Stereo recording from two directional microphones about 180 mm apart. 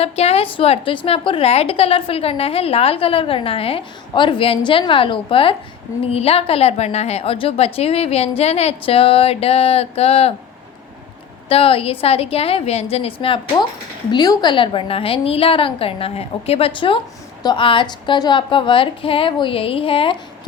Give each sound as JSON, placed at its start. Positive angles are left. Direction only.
{"t": 0.0, "sound": "a woman's voice", "side_deg": 35}
{"t": 11.4, "sound": "a woman's voice", "side_deg": 30}